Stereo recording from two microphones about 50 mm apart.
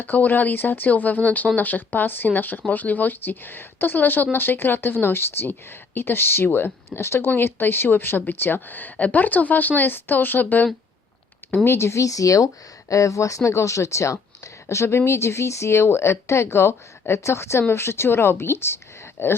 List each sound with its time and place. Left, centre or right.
0.0 s speech: left
11.6 s speech: left
12.9 s speech: left
17.7 s speech: left